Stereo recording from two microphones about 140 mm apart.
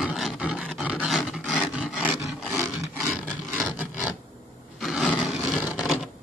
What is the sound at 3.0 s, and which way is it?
Filing, 5° right (ahead or behind).